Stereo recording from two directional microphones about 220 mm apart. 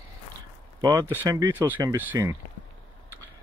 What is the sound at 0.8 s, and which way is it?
A man's voice, 15° right (ahead or behind).